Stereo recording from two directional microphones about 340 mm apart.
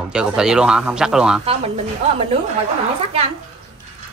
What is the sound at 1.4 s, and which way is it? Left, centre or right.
Speech, centre.